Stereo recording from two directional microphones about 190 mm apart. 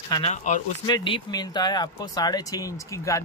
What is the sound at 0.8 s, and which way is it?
Speech, 25° left (ahead or behind).